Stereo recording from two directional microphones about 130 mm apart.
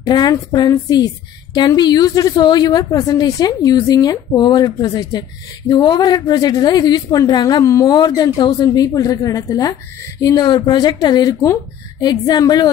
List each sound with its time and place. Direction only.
0.0 s a woman's voice: 30° left (ahead or behind)
7.6 s a woman's voice: 20° left (ahead or behind)